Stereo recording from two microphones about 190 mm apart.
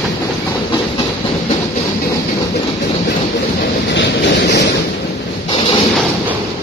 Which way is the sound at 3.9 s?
65° left (ahead or behind).